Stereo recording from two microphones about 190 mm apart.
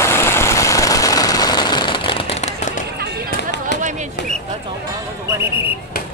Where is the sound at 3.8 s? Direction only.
40° right (ahead or behind).